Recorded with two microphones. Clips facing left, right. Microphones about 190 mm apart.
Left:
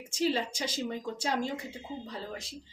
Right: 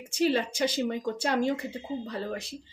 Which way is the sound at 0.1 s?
60° right (ahead or behind).